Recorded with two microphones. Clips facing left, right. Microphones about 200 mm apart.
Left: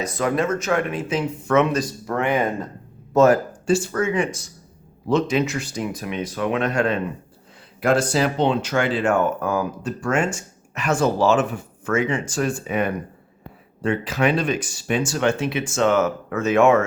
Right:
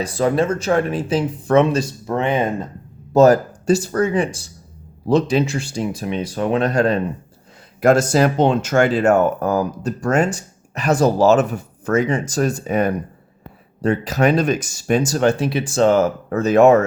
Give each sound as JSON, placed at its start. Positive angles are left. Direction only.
{"t": 0.0, "sound": "speech", "side_deg": -30}
{"t": 3.1, "sound": "speech", "side_deg": -35}